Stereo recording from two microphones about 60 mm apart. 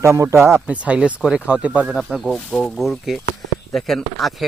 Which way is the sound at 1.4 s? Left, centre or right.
Right.